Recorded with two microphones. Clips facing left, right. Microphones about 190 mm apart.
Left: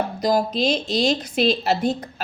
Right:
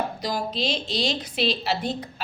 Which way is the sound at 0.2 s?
45° left (ahead or behind).